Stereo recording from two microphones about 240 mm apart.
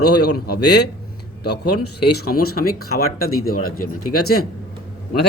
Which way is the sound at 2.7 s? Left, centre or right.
Left.